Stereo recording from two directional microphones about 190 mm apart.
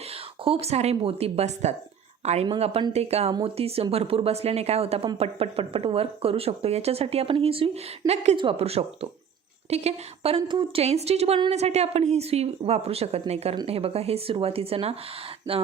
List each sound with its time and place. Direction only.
0.4 s speech: 30° right (ahead or behind)